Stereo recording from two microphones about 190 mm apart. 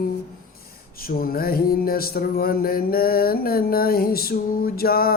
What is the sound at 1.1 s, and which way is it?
Mantra, 50° left (ahead or behind).